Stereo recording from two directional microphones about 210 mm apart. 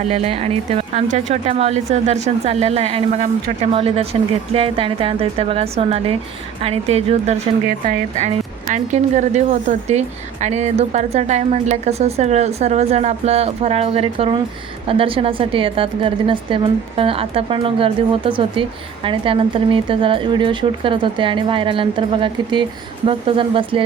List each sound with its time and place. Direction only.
0.1 s speech: 30° right (ahead or behind)